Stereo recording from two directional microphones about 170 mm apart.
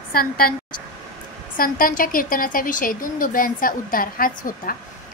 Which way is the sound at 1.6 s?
55° left (ahead or behind).